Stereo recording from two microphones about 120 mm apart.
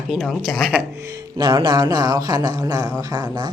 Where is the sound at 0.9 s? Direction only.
25° right (ahead or behind).